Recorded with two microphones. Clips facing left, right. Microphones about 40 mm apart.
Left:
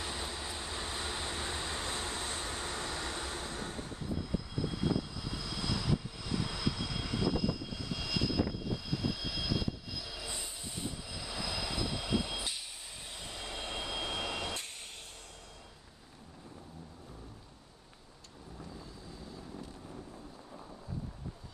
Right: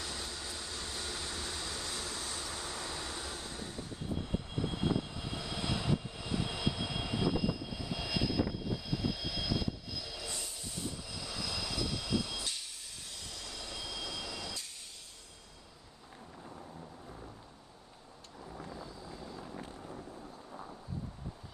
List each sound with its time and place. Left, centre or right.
0.0 s vehicle: left
4.2 s vehicle: right; by 10.3 s centre
10.3 s vehicle: centre
13.1 s train: left
19.3 s vehicle: right